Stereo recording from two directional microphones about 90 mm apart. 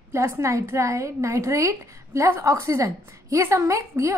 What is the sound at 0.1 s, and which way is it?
A woman's voice, 30° right (ahead or behind).